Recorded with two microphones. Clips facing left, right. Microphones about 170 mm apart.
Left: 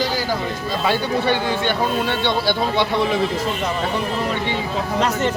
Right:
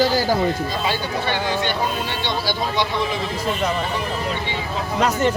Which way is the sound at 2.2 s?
60° left (ahead or behind).